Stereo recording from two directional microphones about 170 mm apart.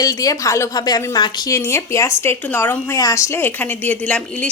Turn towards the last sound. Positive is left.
turn(degrees=10)  # may be behind; listen again after turning